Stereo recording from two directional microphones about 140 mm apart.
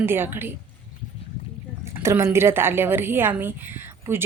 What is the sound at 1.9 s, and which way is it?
A woman's voice, 20° right (ahead or behind).